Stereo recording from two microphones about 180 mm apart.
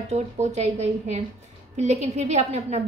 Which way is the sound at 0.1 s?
40° right (ahead or behind).